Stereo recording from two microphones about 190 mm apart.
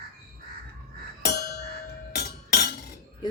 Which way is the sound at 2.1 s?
55° left (ahead or behind).